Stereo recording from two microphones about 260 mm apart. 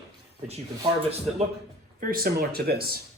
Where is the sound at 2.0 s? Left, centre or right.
Right.